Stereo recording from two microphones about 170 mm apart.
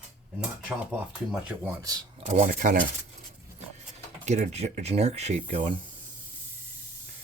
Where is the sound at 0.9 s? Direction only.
10° right (ahead or behind).